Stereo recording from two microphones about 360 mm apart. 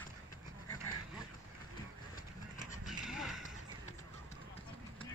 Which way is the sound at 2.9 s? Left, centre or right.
Centre.